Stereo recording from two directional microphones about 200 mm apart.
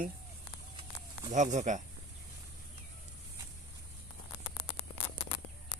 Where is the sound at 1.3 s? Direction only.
40° right (ahead or behind).